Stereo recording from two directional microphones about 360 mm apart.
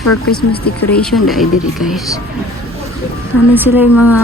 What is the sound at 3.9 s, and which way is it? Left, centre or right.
Speech, left.